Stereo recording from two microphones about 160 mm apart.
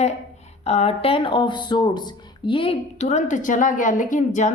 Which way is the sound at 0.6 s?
40° left (ahead or behind).